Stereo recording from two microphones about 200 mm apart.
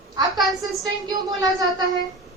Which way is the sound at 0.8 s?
20° right (ahead or behind).